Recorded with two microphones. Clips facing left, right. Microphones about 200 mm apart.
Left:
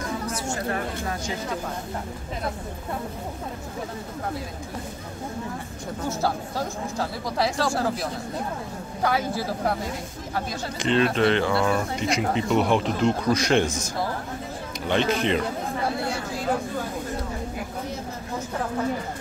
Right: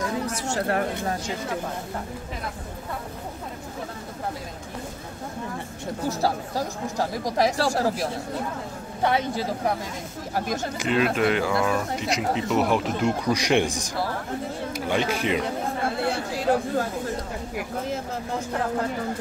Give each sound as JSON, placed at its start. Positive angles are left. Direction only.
{"t": 0.5, "sound": "speech", "side_deg": -65}
{"t": 6.0, "sound": "speech", "side_deg": -35}
{"t": 9.0, "sound": "speech", "side_deg": -20}
{"t": 10.8, "sound": "speech", "side_deg": -5}